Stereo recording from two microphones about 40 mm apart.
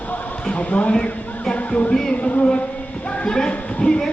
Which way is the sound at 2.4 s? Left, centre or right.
Left.